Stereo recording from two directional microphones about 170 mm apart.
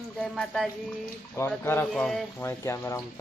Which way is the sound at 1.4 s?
15° left (ahead or behind).